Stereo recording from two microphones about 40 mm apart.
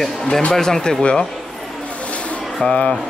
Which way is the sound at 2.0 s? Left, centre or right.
Left.